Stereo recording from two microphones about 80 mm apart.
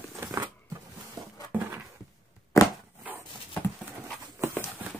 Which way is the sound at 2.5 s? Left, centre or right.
Left.